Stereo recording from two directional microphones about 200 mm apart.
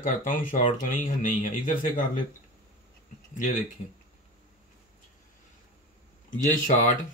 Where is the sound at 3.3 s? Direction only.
45° left (ahead or behind).